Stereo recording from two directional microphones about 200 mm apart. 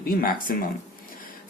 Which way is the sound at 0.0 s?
45° left (ahead or behind).